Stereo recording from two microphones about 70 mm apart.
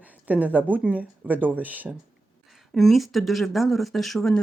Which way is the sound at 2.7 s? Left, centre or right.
Centre.